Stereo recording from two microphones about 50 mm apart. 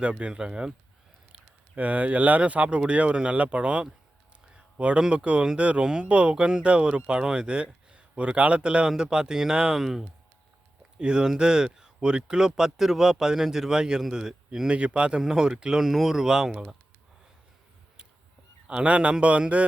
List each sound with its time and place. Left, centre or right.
0.0 s speech: right
1.7 s speech: right; by 16.6 s centre
18.7 s speech: right